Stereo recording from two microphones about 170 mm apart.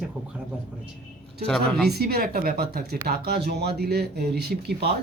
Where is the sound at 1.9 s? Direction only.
65° right (ahead or behind).